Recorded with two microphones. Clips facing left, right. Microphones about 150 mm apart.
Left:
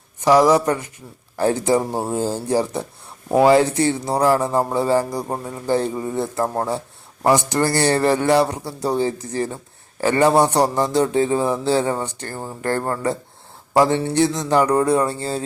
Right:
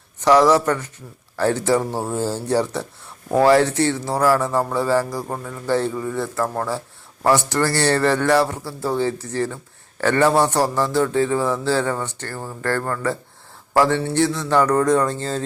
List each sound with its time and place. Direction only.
0.2 s a man's voice: 10° left (ahead or behind)